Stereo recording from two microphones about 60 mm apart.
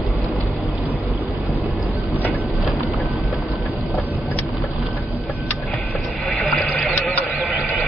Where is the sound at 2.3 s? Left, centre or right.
Right.